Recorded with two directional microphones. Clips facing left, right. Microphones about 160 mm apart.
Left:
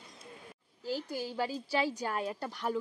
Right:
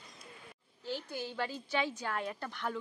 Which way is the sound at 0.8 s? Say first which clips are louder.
Left 3 dB; 40° left (ahead or behind).